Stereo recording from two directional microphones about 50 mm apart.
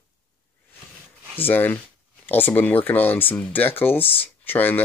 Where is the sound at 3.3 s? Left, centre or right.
Left.